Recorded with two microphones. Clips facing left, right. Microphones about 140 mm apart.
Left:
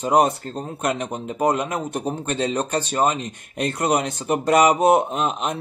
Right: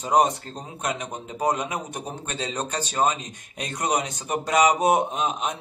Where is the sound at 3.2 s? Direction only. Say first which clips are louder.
Left 9 dB; 55° left (ahead or behind).